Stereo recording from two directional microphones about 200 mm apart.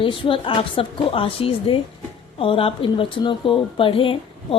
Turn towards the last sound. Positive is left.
turn(degrees=25)  # may be behind; listen again after turning